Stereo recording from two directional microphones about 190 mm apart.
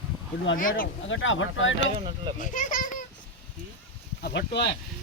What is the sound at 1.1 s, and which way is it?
Speech, 90° left.